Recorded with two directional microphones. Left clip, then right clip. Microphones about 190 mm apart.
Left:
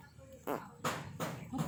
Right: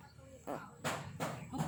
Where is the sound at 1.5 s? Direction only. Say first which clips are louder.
Left 2 dB; 45° right (ahead or behind).